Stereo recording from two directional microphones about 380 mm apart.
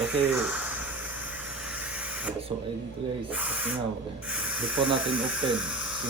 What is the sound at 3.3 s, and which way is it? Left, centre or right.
Speech, centre.